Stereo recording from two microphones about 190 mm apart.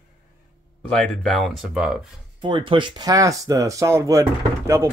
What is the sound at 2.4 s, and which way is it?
Speech, 25° right (ahead or behind).